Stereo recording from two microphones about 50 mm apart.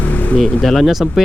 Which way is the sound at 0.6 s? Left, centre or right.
Centre.